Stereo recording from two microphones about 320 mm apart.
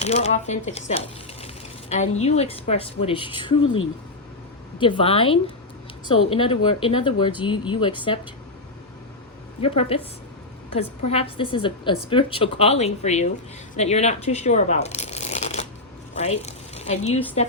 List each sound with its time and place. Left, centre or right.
0.0 s speech: centre
3.6 s speech: left
4.8 s speech: centre
9.6 s speech: centre
11.1 s speech: centre